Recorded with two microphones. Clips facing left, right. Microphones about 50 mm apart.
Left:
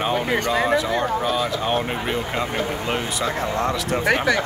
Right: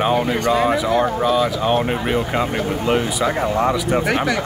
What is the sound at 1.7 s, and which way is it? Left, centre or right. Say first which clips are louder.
Speech: right 4 dB; centre.